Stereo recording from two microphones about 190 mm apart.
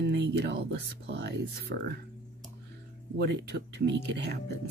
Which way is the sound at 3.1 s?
65° right (ahead or behind).